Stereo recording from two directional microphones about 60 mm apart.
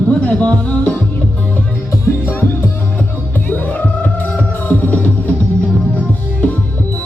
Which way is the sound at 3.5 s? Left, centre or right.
Left.